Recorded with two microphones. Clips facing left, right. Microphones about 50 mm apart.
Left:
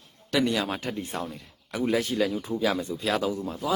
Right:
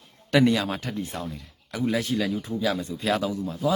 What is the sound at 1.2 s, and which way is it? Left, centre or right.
Speech, centre.